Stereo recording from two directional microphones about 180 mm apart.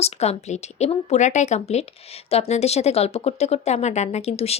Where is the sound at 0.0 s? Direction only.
35° left (ahead or behind).